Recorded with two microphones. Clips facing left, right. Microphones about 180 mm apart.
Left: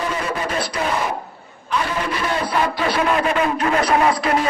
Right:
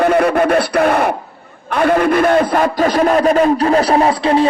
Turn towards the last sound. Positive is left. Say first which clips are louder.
# right 5 dB
turn(degrees=-30)  # may be behind; listen again after turning